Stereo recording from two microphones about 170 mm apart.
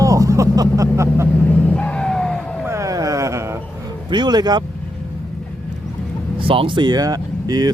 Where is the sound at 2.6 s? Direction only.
15° right (ahead or behind).